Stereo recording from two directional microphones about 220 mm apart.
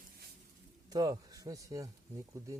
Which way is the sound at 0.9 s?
15° right (ahead or behind).